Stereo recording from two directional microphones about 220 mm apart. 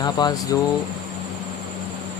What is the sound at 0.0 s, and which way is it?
Speech, 20° left (ahead or behind).